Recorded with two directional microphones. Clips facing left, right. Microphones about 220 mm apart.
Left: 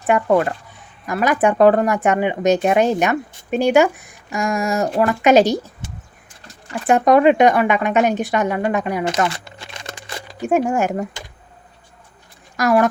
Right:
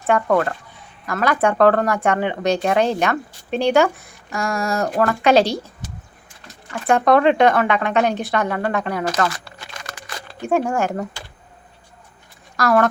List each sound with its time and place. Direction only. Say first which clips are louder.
0.0 s a woman's voice: left 2 dB; 15° left (ahead or behind)
6.8 s speech: left 2 dB; 15° left (ahead or behind)
10.2 s a woman's voice: left 2 dB; 15° left (ahead or behind)
12.5 s speech: left 1 dB; 15° left (ahead or behind)